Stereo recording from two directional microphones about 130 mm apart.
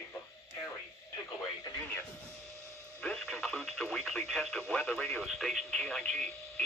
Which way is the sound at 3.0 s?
5° left (ahead or behind).